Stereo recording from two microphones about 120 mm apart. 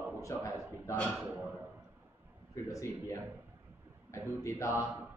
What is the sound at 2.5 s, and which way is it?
Speech, 25° left (ahead or behind).